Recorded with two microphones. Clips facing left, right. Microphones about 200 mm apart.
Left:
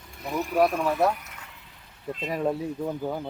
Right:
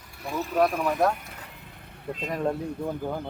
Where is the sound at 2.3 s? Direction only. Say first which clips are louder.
Left 1 dB; 5° left (ahead or behind).